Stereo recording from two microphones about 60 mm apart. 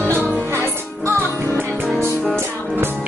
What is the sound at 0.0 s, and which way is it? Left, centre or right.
Music, right.